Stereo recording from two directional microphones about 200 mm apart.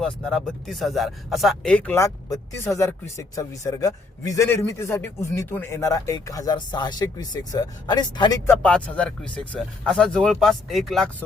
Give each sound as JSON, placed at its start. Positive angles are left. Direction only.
{"t": 0.0, "sound": "a man's voice", "side_deg": 0}
{"t": 8.4, "sound": "speech", "side_deg": 5}